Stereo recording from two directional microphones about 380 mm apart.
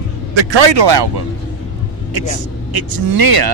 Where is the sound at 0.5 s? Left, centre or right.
Right.